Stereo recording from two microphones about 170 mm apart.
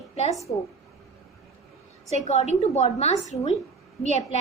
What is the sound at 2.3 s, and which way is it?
A woman's voice, 40° left (ahead or behind).